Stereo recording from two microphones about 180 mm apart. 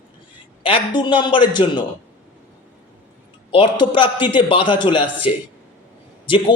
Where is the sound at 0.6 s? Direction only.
25° left (ahead or behind).